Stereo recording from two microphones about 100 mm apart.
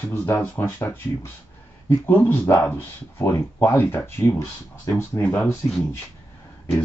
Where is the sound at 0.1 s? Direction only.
25° left (ahead or behind).